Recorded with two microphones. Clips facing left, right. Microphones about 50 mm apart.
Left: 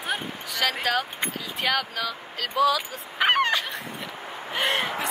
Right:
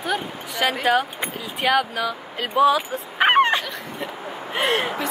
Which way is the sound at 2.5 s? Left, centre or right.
Right.